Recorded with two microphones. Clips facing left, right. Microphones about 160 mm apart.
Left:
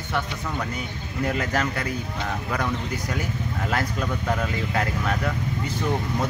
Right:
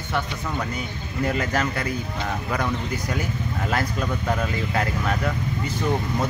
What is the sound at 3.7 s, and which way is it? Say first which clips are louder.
A man's voice: right 1 dB; 5° right (ahead or behind).